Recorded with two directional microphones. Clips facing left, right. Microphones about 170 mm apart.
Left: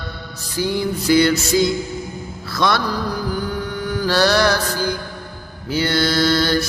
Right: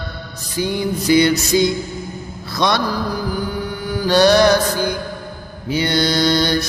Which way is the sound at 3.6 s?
10° right (ahead or behind).